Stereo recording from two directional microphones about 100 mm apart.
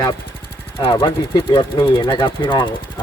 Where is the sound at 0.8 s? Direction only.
55° left (ahead or behind).